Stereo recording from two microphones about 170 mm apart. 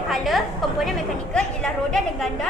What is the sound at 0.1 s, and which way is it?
A woman's voice, centre (ahead or behind).